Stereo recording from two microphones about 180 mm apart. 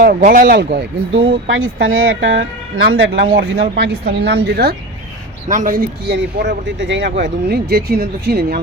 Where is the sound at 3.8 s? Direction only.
70° right (ahead or behind).